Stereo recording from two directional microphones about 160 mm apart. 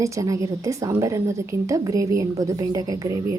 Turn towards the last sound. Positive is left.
turn(degrees=-25)  # may be behind; listen again after turning